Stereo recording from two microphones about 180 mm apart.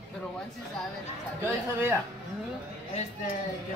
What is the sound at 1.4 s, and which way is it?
Speech, 10° right (ahead or behind).